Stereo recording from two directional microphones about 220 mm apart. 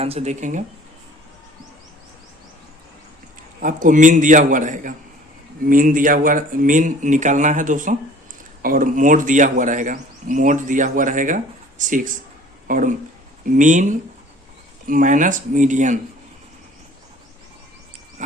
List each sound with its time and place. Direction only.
0.0 s speech: 30° right (ahead or behind)
3.6 s speech: 35° right (ahead or behind)